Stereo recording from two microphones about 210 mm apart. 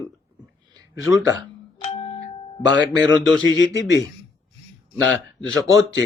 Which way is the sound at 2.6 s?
60° left (ahead or behind).